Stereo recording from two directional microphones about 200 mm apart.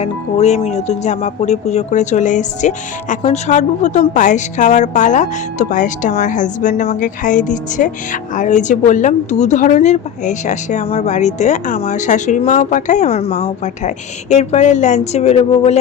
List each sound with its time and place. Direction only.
0.0 s speech: 35° left (ahead or behind)